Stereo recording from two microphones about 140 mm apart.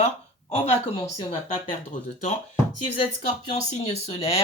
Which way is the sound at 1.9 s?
65° left (ahead or behind).